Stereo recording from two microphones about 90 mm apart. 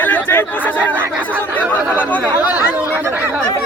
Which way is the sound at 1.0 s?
15° right (ahead or behind).